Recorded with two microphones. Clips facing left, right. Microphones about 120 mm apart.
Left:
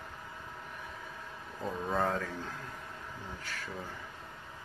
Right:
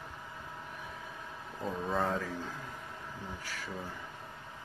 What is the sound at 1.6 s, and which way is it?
Speech, centre (ahead or behind).